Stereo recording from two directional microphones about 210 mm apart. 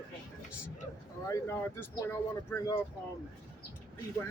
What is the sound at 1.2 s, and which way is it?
Speech, 15° left (ahead or behind).